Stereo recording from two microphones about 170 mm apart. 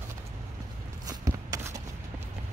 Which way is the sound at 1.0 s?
20° right (ahead or behind).